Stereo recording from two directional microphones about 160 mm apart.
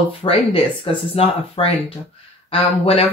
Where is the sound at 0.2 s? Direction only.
35° left (ahead or behind).